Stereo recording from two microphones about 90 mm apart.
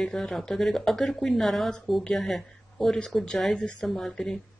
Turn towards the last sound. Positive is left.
turn(degrees=5)  # may be behind; listen again after turning